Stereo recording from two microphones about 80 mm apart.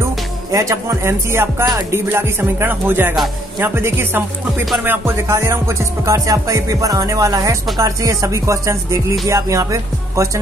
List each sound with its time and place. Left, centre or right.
0.0 s speech: right
1.9 s music: right